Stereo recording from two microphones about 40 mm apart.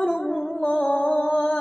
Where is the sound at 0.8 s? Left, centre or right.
Left.